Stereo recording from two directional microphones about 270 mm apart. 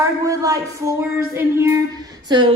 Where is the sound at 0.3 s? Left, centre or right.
Centre.